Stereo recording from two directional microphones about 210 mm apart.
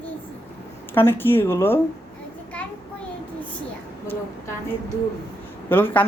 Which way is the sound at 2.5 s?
5° left (ahead or behind).